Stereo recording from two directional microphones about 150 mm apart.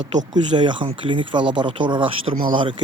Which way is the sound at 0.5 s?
30° right (ahead or behind).